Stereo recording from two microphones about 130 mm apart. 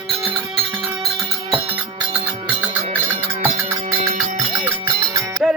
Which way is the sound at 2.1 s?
45° right (ahead or behind).